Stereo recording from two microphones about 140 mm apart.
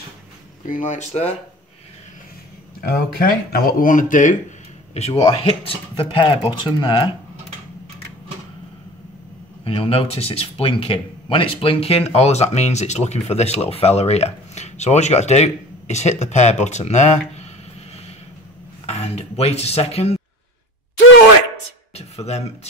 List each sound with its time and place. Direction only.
0.7 s speech: 65° left (ahead or behind)
2.8 s speech: 90° left; by 4.4 s 70° left (ahead or behind)
4.9 s speech: 50° left (ahead or behind); by 7.2 s 35° left (ahead or behind)
9.7 s speech: 40° left (ahead or behind)
18.9 s speech: 50° left (ahead or behind)
21.9 s a sound: 50° left (ahead or behind)